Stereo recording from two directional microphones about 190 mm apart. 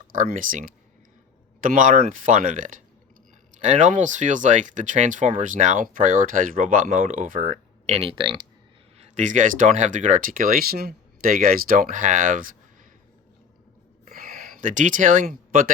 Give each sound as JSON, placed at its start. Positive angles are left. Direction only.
{"t": 0.1, "sound": "speech", "side_deg": -45}
{"t": 9.0, "sound": "speech", "side_deg": -40}
{"t": 14.1, "sound": "a sound", "side_deg": -45}